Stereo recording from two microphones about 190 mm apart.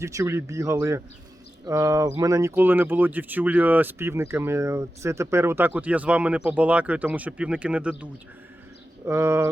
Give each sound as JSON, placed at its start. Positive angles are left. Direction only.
{"t": 0.0, "sound": "speech", "side_deg": -15}